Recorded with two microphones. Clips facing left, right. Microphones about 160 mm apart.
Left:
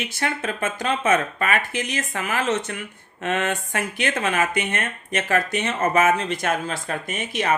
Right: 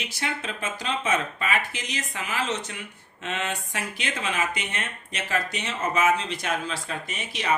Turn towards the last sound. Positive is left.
turn(degrees=50)  # may be behind; listen again after turning